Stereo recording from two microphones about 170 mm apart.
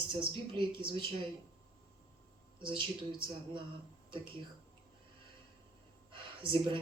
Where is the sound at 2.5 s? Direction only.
30° right (ahead or behind).